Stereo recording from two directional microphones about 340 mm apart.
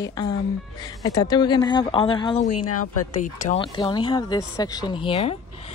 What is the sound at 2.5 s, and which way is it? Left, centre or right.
Speech, left.